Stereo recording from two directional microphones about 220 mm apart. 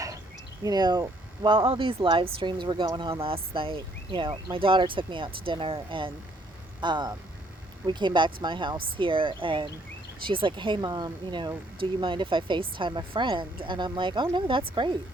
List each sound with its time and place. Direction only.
0.6 s speech: 20° right (ahead or behind)